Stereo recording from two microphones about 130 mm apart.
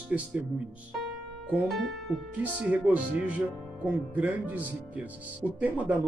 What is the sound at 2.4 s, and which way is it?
Speech, 10° right (ahead or behind).